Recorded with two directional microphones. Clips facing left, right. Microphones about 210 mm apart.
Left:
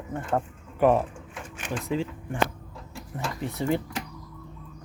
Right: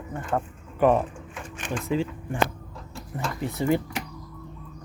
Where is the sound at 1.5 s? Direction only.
10° left (ahead or behind).